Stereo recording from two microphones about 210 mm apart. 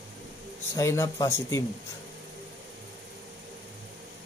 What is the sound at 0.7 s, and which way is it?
Speech, 15° left (ahead or behind).